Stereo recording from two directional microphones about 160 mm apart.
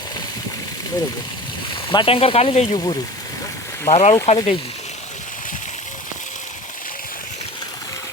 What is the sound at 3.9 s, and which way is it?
Speech, 45° left (ahead or behind).